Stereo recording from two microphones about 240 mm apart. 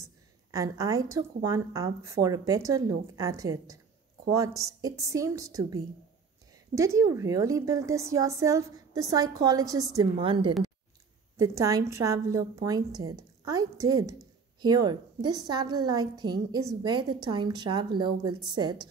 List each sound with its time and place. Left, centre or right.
0.0 s a sound: centre
1.1 s a woman's voice: centre
12.9 s speech: right
13.5 s a woman's voice: centre